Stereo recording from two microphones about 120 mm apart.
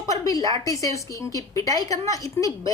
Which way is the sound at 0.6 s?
25° left (ahead or behind).